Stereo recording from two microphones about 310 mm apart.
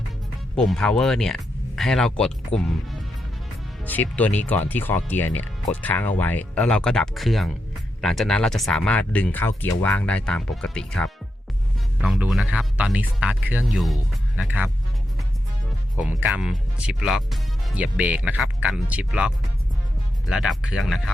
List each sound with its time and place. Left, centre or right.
0.5 s speech: centre
2.5 s speech: centre
3.8 s speech: centre
16.0 s speech: centre